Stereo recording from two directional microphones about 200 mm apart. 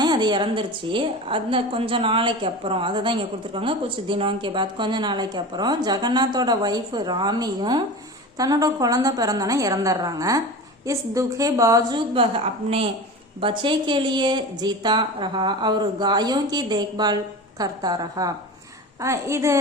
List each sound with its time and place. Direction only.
0.0 s a woman's voice: 20° right (ahead or behind)